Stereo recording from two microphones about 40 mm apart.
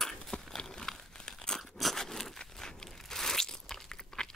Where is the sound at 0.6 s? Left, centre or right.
Centre.